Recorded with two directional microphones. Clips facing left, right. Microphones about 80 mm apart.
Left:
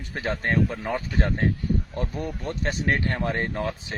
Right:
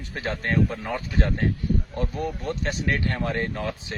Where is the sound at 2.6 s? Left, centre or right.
Left.